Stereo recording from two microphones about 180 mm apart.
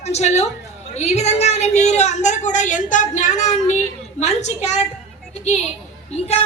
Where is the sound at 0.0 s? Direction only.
40° left (ahead or behind).